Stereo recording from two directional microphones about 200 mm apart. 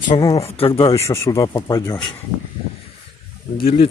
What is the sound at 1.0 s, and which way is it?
Speech, 15° left (ahead or behind).